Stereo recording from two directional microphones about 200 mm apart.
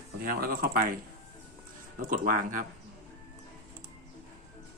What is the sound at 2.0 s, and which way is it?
Speech, 40° right (ahead or behind).